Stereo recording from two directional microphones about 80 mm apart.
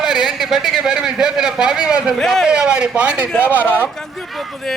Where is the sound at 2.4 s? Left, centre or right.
Centre.